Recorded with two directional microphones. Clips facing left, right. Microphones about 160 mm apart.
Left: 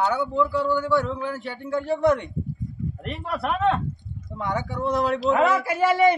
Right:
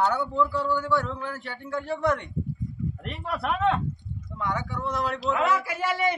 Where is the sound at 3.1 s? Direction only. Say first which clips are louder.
Left 3 dB; 5° left (ahead or behind).